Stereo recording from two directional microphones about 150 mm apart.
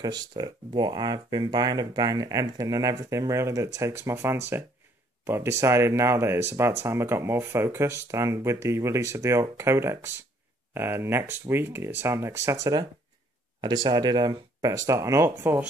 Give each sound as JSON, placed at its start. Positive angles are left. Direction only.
{"t": 0.0, "sound": "speech", "side_deg": -30}
{"t": 13.6, "sound": "speech", "side_deg": -30}